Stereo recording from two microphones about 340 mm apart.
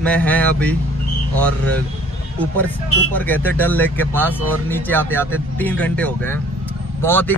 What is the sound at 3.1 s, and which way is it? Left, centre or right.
Speech, centre.